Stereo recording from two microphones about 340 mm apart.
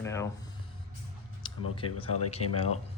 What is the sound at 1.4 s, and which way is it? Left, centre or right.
Speech, centre.